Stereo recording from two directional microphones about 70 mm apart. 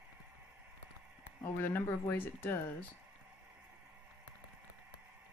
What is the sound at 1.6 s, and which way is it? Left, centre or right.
Speech, left.